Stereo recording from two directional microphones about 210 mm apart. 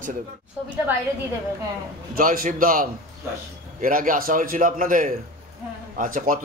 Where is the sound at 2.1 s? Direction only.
40° right (ahead or behind).